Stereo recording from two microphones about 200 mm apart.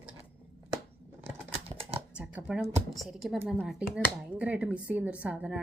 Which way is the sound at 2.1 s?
5° right (ahead or behind).